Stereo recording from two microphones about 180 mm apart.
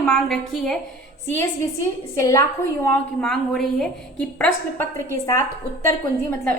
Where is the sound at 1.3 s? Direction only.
15° left (ahead or behind).